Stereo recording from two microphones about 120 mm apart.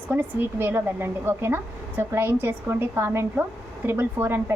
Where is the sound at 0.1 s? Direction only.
15° right (ahead or behind).